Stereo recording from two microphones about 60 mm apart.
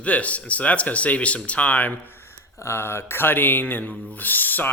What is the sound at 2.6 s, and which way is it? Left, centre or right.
Speech, left.